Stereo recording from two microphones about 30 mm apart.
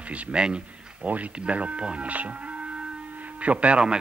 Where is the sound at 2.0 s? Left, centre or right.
Right.